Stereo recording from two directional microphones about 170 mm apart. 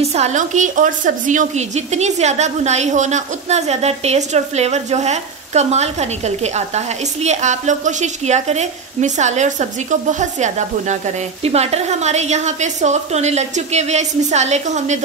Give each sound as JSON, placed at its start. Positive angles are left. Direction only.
{"t": 0.0, "sound": "a woman's voice", "side_deg": -40}